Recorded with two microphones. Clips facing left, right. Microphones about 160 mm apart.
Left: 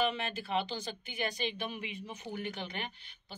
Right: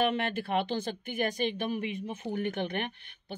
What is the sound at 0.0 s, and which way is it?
A woman's voice, 60° right (ahead or behind).